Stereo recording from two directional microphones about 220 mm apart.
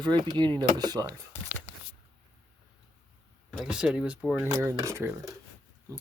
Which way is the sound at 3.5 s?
Centre (ahead or behind).